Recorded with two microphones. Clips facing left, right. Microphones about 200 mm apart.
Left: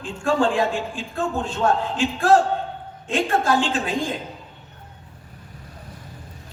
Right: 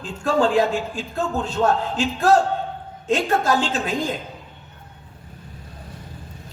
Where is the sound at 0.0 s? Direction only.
40° right (ahead or behind).